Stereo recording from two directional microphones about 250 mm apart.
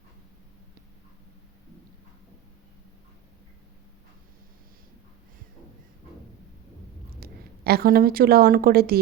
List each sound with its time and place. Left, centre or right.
7.2 s a woman's voice: right